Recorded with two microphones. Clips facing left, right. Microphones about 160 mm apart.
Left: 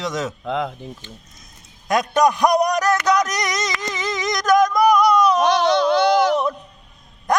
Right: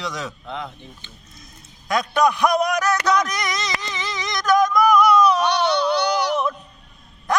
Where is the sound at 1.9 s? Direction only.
45° left (ahead or behind).